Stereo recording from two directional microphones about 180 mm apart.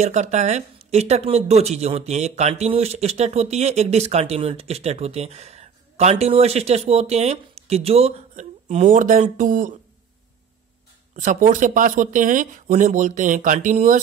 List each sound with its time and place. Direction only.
0.0 s speech: 40° right (ahead or behind)
11.1 s speech: 45° right (ahead or behind)